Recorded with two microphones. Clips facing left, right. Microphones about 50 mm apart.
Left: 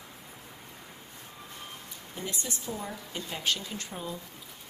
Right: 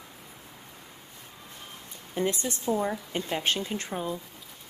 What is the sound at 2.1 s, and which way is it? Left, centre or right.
A woman's voice, right.